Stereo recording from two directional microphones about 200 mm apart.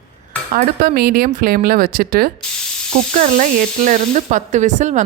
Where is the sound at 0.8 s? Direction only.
50° right (ahead or behind).